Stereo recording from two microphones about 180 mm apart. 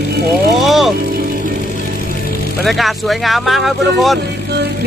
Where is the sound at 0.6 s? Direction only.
Centre (ahead or behind).